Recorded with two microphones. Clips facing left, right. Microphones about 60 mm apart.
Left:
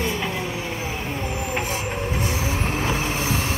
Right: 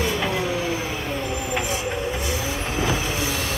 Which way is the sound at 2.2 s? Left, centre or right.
Left.